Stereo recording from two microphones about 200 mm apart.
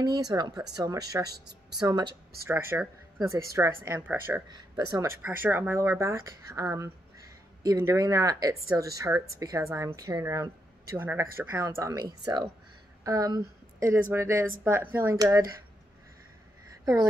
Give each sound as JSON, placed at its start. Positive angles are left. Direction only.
{"t": 0.2, "sound": "speech", "side_deg": -20}